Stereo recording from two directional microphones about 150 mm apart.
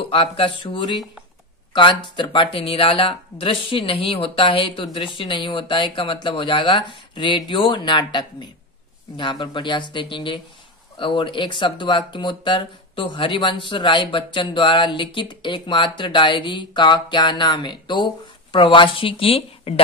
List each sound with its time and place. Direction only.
0.0 s speech: 40° left (ahead or behind)